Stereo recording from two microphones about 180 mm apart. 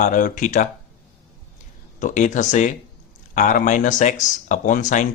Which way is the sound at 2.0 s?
45° left (ahead or behind).